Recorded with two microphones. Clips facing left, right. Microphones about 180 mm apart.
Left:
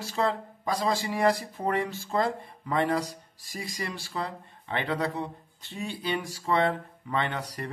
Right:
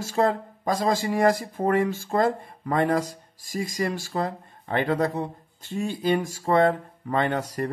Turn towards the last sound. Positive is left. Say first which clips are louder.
# right 7 dB
turn(degrees=-45)  # may be behind; listen again after turning